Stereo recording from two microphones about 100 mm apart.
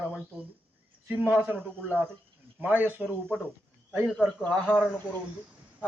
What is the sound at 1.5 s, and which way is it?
Speech, 15° left (ahead or behind).